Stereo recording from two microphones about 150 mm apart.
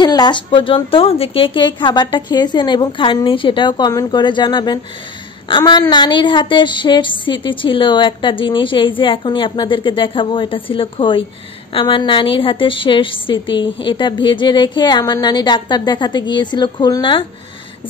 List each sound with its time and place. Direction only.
0.0 s a woman's voice: 30° left (ahead or behind)